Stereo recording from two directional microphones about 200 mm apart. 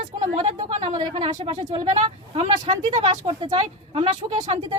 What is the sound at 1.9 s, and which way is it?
Speech, 30° right (ahead or behind).